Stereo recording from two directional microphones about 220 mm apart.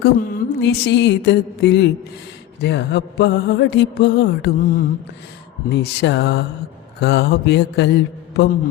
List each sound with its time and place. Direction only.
0.0 s mantra: 40° left (ahead or behind)
5.6 s mantra: 50° left (ahead or behind)
8.3 s a man's voice: 50° left (ahead or behind)